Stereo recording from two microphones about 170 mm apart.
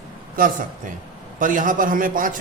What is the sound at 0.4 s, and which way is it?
A man's voice, 55° right (ahead or behind).